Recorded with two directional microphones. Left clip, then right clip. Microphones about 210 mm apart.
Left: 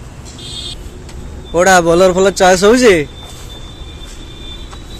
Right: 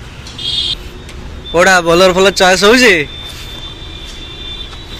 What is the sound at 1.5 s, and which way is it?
A man's voice, 10° left (ahead or behind).